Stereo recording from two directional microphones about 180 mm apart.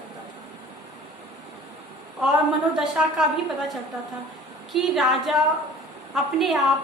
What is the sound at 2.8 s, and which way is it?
Speech, 5° right (ahead or behind).